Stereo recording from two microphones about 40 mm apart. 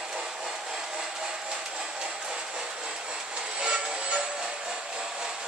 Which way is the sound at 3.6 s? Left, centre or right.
Right.